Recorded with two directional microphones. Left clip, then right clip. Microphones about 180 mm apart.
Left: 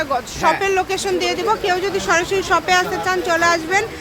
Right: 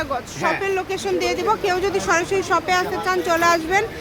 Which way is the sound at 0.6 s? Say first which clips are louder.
Left 4 dB; 30° left (ahead or behind).